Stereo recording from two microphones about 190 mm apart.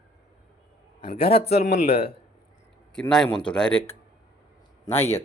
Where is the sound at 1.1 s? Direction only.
30° left (ahead or behind).